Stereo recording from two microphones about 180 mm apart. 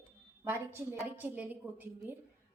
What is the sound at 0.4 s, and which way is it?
A woman's voice, 10° right (ahead or behind).